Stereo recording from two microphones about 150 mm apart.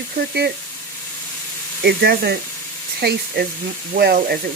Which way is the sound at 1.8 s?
90° right.